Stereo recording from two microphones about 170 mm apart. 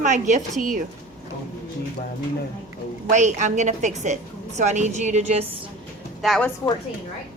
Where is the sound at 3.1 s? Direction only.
45° right (ahead or behind).